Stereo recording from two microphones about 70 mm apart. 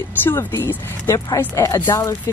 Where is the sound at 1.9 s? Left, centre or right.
Left.